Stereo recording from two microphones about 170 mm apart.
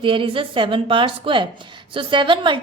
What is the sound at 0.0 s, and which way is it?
A woman's voice, 30° right (ahead or behind).